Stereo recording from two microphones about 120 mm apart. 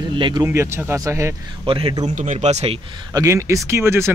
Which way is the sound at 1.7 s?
55° right (ahead or behind).